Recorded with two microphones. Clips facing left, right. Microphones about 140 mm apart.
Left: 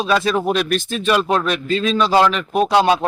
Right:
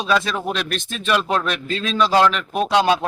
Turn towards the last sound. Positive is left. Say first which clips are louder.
# left 3 dB
turn(degrees=0)  # may be behind; listen again after turning